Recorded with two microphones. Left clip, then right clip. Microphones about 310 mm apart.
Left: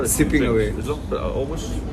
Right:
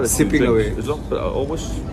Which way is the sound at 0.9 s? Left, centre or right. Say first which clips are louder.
Right 3 dB; right.